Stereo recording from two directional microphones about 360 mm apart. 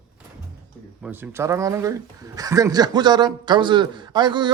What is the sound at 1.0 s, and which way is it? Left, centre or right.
Speech, centre.